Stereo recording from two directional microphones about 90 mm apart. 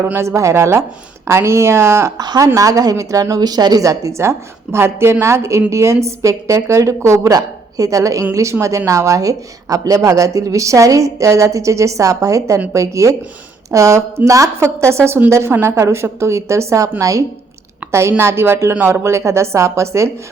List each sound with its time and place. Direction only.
0.0 s speech: 30° right (ahead or behind)
2.1 s speech: 50° right (ahead or behind)
2.6 s a woman's voice: 40° right (ahead or behind)
18.2 s a woman's voice: 25° right (ahead or behind)